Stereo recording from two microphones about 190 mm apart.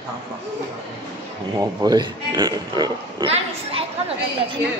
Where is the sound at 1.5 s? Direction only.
20° right (ahead or behind).